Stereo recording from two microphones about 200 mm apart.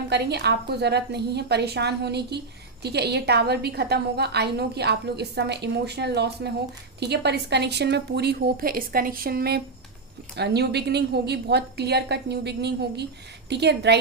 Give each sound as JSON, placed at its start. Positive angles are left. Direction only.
{"t": 0.1, "sound": "a woman's voice", "side_deg": -55}